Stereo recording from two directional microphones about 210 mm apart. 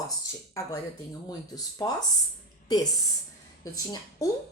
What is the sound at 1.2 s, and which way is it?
Speech, 20° left (ahead or behind).